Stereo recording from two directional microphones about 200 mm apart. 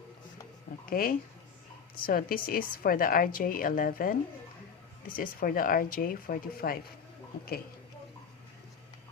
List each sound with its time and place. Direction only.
0.9 s a woman's voice: 45° left (ahead or behind)